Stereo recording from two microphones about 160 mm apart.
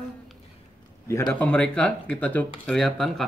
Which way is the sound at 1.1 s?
15° left (ahead or behind).